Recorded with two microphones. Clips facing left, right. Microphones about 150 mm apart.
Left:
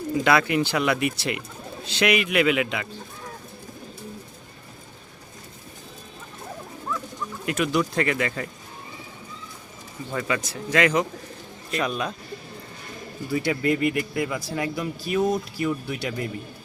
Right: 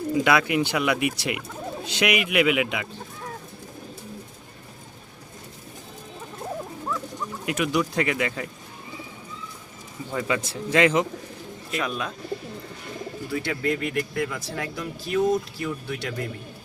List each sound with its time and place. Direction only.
0.1 s speech: 10° right (ahead or behind)
7.4 s speech: 15° right (ahead or behind)
10.1 s speech: 15° right (ahead or behind)
11.7 s speech: centre (ahead or behind)
13.3 s speech: 5° left (ahead or behind)